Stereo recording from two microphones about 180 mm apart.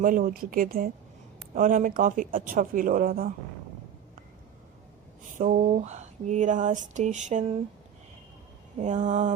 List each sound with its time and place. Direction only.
0.0 s speech: 50° right (ahead or behind)
5.4 s speech: 50° right (ahead or behind)
8.8 s speech: 40° right (ahead or behind)